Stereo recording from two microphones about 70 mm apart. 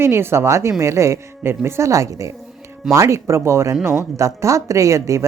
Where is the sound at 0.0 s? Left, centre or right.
Right.